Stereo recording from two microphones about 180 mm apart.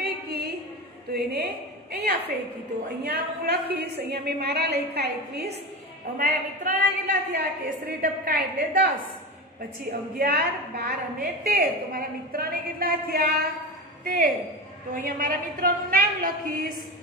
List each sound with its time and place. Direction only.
0.0 s a sound: 60° right (ahead or behind)
1.1 s a woman's voice: 60° right (ahead or behind)
8.0 s a woman's voice: 55° right (ahead or behind)